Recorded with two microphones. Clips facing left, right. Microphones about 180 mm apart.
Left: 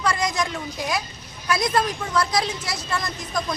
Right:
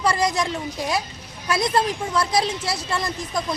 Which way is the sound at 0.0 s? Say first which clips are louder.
Right 2 dB; 30° right (ahead or behind).